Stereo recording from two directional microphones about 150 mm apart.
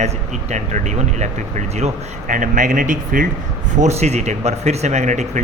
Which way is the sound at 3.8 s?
50° right (ahead or behind).